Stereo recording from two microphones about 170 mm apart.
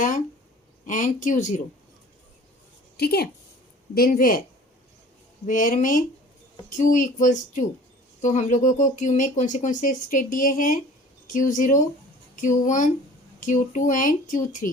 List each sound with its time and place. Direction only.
0.9 s speech: 50° left (ahead or behind)
3.0 s a woman's voice: 70° left (ahead or behind)
3.9 s speech: 55° left (ahead or behind)
5.5 s speech: 50° left (ahead or behind)